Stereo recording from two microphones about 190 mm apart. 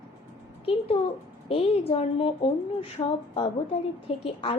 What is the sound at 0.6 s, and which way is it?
A woman's voice, 30° left (ahead or behind).